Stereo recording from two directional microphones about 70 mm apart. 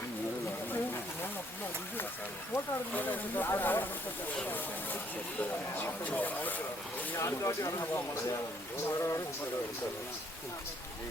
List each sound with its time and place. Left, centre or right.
2.9 s speech: left
5.8 s speech: left
7.1 s speech: left
9.0 s speech: left